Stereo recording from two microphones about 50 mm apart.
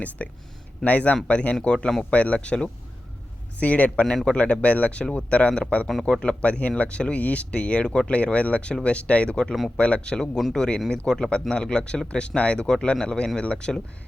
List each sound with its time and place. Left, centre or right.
0.2 s speech: left
5.5 s speech: centre
6.1 s speech: left
10.3 s speech: centre
10.8 s speech: centre